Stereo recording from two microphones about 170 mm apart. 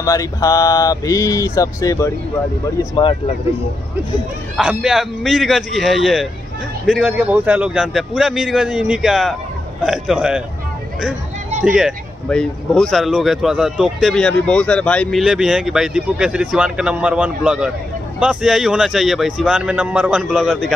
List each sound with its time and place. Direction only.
0.0 s speech: 20° left (ahead or behind)
4.6 s speech: 5° right (ahead or behind)
11.6 s speech: centre (ahead or behind)